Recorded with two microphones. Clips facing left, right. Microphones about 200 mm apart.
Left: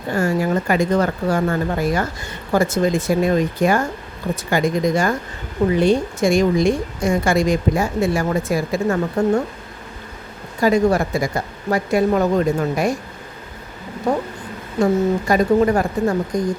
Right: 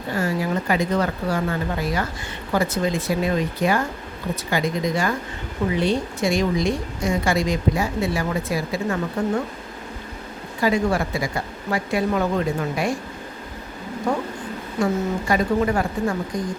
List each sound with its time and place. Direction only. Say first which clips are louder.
0.1 s a woman's voice: left 5 dB; 50° left (ahead or behind)
10.6 s a woman's voice: left 5 dB; 45° left (ahead or behind)
15.3 s a woman's voice: left 4 dB; 40° left (ahead or behind)